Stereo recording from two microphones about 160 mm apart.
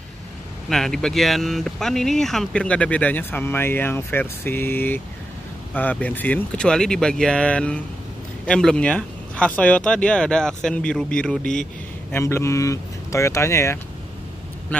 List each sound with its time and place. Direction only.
0.7 s speech: 5° left (ahead or behind)
12.1 s speech: 15° left (ahead or behind)